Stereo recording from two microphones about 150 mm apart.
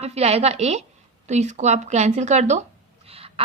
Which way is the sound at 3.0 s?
40° right (ahead or behind).